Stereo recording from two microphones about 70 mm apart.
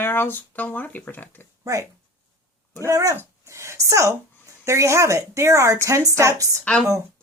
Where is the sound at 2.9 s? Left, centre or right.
Right.